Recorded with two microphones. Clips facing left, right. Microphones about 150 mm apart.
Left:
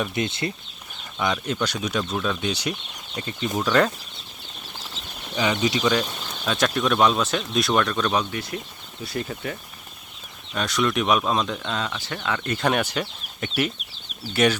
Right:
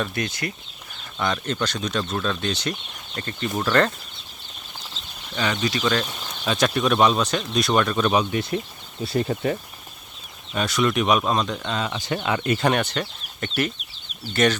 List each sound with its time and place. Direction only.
0.0 s speech: 20° left (ahead or behind)
1.2 s speech: 10° left (ahead or behind)
5.3 s speech: 15° left (ahead or behind)
6.4 s speech: centre (ahead or behind)
8.3 s speech: 25° right (ahead or behind)
10.5 s speech: centre (ahead or behind)
11.9 s speech: 20° right (ahead or behind)
12.5 s speech: centre (ahead or behind)